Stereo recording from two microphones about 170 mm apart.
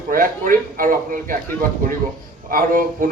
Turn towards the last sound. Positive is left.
turn(degrees=-55)  # may be behind; listen again after turning